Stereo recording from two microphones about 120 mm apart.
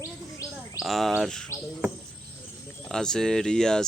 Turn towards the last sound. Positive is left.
turn(degrees=5)  # may be behind; listen again after turning